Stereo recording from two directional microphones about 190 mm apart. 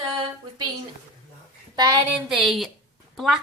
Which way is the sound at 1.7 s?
20° right (ahead or behind).